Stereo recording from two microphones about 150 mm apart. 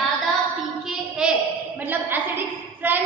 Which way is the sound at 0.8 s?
Centre (ahead or behind).